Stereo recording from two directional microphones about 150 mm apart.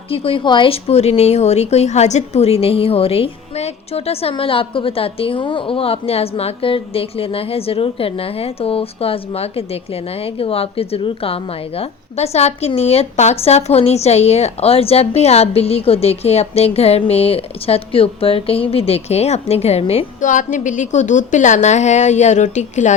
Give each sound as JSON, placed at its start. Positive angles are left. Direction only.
{"t": 0.1, "sound": "a woman's voice", "side_deg": 40}
{"t": 20.2, "sound": "a woman's voice", "side_deg": 60}